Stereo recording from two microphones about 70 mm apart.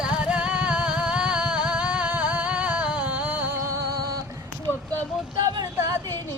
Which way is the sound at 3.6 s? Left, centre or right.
Right.